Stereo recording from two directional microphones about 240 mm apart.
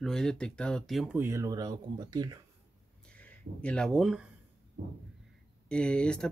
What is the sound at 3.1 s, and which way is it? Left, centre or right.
Speech, centre.